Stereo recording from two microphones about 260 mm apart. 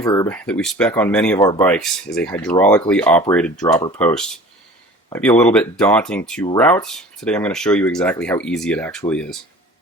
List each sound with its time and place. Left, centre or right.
0.0 s speech: centre